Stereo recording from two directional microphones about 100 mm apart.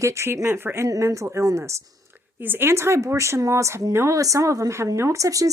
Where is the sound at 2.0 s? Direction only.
20° right (ahead or behind).